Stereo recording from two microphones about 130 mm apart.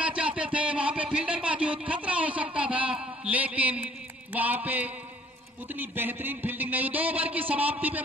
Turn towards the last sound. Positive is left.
turn(degrees=-10)  # may be behind; listen again after turning